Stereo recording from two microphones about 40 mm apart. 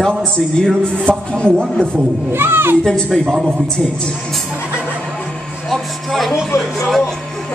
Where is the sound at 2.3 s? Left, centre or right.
Right.